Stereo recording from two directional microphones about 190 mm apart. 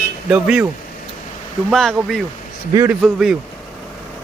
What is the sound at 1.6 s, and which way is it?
Speech, centre (ahead or behind).